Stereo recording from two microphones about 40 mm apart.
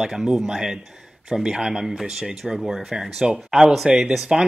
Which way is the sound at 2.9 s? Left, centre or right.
Centre.